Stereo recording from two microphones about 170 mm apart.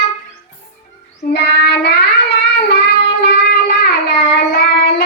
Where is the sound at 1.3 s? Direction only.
75° left (ahead or behind).